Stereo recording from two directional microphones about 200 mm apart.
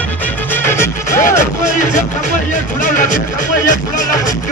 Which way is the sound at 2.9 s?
40° left (ahead or behind).